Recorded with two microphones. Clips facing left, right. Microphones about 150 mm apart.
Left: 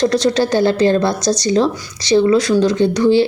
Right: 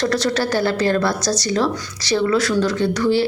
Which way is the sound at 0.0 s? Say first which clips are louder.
Left 5 dB; 20° left (ahead or behind).